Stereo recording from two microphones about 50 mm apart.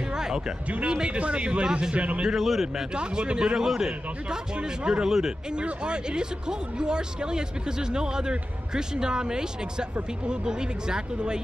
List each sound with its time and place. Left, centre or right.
0.1 s music: centre
0.8 s speech: centre
2.2 s a man's voice: centre
2.7 s speech: centre
3.5 s speech: centre
5.5 s speech: centre